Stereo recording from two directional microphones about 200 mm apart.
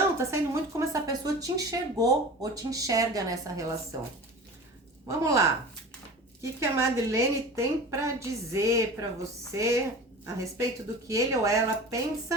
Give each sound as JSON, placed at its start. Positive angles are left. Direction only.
{"t": 0.2, "sound": "speech", "side_deg": -15}
{"t": 5.0, "sound": "speech", "side_deg": -15}